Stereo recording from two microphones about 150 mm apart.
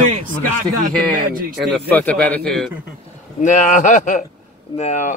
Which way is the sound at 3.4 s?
55° left (ahead or behind).